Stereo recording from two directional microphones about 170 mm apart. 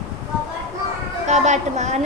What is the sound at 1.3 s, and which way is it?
Speech, 45° right (ahead or behind).